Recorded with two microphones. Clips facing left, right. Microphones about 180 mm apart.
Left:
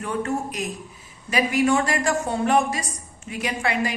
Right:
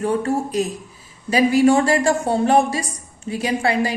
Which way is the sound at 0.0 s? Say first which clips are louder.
Right 6 dB; 35° right (ahead or behind).